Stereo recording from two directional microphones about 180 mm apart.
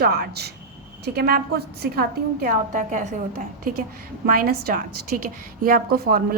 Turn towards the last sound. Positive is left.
turn(degrees=-55)  # may be behind; listen again after turning